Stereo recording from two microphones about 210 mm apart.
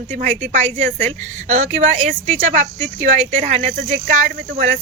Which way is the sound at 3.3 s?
35° right (ahead or behind).